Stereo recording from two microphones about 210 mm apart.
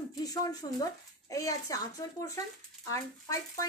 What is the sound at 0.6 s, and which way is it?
Speech, 20° left (ahead or behind).